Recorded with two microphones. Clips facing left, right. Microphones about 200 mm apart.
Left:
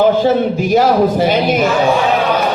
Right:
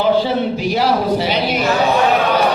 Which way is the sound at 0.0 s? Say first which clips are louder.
Left 4 dB; 50° left (ahead or behind).